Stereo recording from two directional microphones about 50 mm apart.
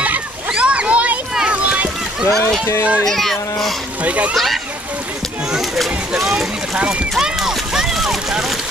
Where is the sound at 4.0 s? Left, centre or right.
Right.